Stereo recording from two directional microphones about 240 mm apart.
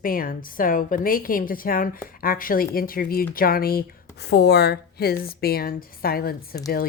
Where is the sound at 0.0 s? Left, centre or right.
Left.